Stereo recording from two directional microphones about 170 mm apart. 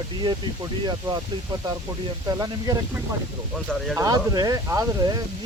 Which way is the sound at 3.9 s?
20° right (ahead or behind).